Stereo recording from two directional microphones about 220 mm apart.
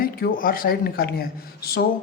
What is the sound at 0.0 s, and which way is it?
A woman's voice, 40° left (ahead or behind).